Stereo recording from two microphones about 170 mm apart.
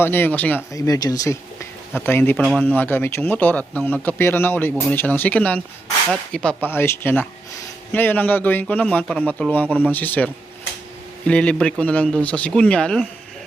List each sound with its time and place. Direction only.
0.0 s speech: 15° left (ahead or behind)